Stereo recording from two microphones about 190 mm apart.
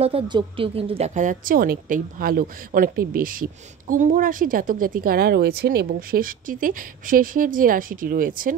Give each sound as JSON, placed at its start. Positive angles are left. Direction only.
{"t": 0.0, "sound": "a woman's voice", "side_deg": -30}